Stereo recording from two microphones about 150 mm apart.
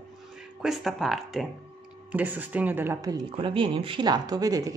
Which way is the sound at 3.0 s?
25° right (ahead or behind).